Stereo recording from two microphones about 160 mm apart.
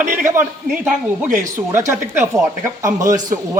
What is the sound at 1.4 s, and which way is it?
A man's voice, 15° right (ahead or behind).